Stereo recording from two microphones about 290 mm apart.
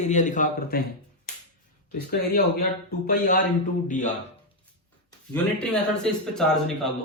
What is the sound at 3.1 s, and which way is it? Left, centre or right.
A man's voice, left.